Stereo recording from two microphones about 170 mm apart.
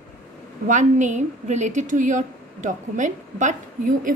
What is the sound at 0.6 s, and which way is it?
A woman's voice, 45° right (ahead or behind).